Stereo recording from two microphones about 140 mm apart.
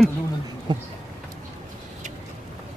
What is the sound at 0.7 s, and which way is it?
Speech, 35° right (ahead or behind).